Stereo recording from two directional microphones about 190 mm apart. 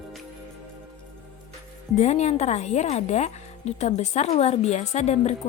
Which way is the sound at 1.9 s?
35° left (ahead or behind).